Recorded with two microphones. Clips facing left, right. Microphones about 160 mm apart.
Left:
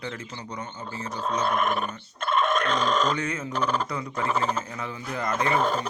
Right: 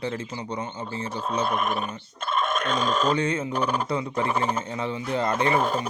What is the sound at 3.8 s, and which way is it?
Speech, 25° right (ahead or behind).